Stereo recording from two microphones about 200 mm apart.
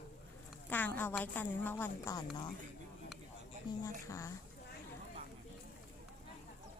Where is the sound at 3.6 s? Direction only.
20° left (ahead or behind).